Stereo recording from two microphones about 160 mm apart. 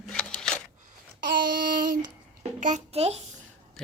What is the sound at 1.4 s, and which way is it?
Child singing, 60° right (ahead or behind).